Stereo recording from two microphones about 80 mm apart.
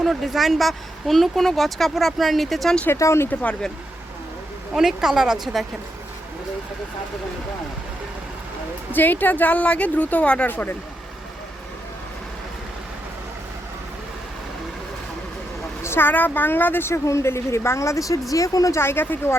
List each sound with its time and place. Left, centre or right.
0.0 s speech: centre
3.0 s speech: left
4.7 s speech: centre
8.9 s speech: left
15.8 s speech: left
18.8 s speech: left